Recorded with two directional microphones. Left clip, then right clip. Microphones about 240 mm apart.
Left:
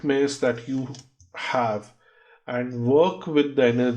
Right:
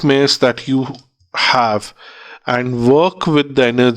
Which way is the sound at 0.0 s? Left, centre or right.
Right.